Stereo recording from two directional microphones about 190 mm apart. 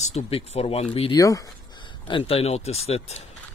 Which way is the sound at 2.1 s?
30° left (ahead or behind).